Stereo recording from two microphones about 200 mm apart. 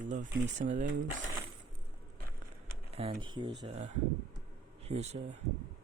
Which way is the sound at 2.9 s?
30° right (ahead or behind).